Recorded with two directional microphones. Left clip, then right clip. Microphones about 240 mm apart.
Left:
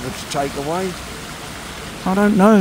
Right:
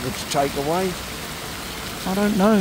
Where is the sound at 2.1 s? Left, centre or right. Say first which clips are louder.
Left 6 dB; centre.